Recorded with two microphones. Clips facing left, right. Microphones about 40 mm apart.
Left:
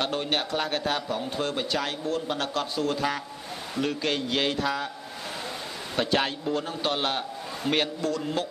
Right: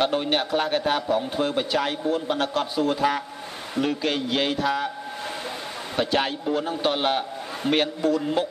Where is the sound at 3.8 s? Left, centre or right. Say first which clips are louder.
Right 3 dB; centre.